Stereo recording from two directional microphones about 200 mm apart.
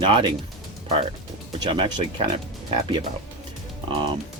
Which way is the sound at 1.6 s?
20° right (ahead or behind).